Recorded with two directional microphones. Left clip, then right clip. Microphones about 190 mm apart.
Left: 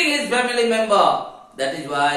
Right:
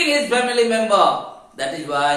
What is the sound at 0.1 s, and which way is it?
A man's voice, 20° right (ahead or behind).